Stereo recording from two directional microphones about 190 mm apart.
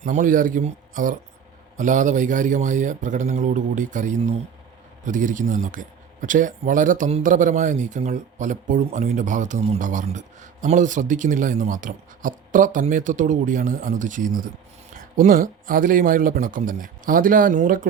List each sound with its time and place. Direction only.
0.0 s a man's voice: 40° right (ahead or behind)